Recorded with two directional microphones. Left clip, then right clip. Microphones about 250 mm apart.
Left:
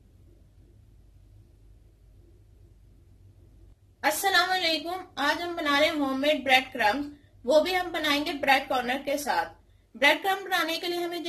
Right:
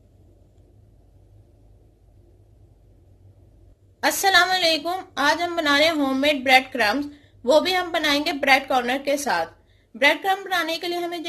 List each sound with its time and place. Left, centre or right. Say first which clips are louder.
4.0 s a woman's voice: right 6 dB; right